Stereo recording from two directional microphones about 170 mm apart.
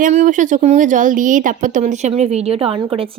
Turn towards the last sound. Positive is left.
turn(degrees=-35)  # may be behind; listen again after turning